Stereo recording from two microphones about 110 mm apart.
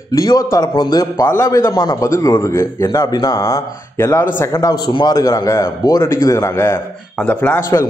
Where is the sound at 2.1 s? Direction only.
25° left (ahead or behind).